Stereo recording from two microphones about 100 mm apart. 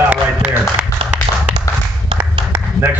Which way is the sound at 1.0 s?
65° right (ahead or behind).